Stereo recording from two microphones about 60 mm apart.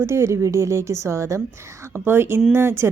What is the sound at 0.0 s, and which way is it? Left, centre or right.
A woman's voice, right.